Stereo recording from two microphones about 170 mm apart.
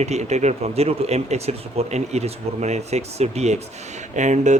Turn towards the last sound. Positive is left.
turn(degrees=-45)  # may be behind; listen again after turning